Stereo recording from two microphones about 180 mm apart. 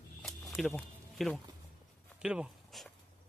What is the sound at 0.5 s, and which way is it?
Speech, centre (ahead or behind).